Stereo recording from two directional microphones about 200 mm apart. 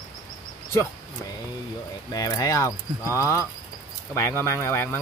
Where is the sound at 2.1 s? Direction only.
20° left (ahead or behind).